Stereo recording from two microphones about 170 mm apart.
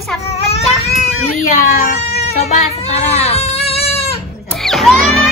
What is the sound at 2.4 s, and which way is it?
Speech, 40° left (ahead or behind).